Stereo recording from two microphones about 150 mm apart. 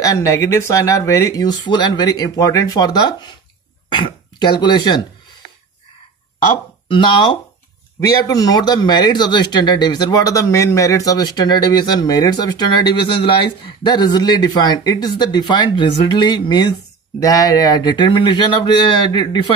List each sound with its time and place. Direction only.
0.0 s speech: 20° left (ahead or behind)
6.9 s speech: 30° left (ahead or behind)